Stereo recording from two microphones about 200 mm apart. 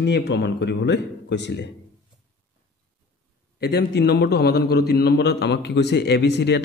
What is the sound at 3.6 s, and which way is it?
A man's voice, 55° left (ahead or behind).